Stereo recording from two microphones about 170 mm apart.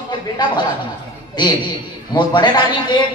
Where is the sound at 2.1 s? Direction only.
25° left (ahead or behind).